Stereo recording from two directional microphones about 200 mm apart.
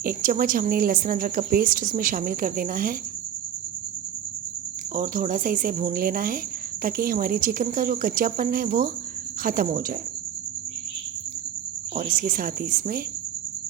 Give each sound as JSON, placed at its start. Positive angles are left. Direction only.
{"t": 0.0, "sound": "a woman's voice", "side_deg": -45}
{"t": 4.9, "sound": "a woman's voice", "side_deg": -45}
{"t": 11.9, "sound": "a woman's voice", "side_deg": -45}